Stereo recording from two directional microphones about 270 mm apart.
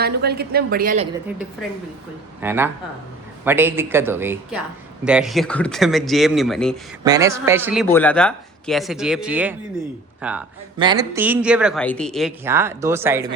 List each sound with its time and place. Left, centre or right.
0.0 s a woman's voice: right
2.4 s speech: centre
7.0 s speech: centre
7.9 s a man's voice: centre
10.8 s speech: centre
12.5 s speech: centre